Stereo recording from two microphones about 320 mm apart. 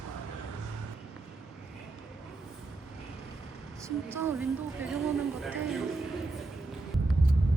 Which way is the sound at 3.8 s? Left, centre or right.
Centre.